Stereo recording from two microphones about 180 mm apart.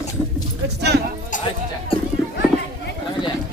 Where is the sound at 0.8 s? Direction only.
65° right (ahead or behind).